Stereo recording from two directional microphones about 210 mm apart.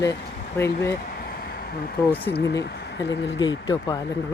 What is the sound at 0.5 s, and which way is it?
Speech, 15° left (ahead or behind).